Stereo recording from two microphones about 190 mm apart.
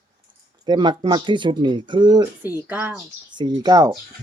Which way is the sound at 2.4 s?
10° right (ahead or behind).